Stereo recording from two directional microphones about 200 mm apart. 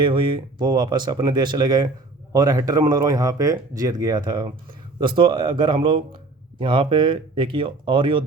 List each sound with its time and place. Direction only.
0.0 s speech: 25° right (ahead or behind)